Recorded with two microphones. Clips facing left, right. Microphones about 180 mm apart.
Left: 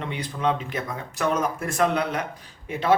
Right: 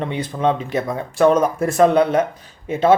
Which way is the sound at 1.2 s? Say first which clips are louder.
Right 10 dB; 35° right (ahead or behind).